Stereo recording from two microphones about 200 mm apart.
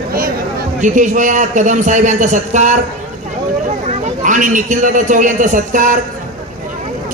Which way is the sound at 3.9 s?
40° right (ahead or behind).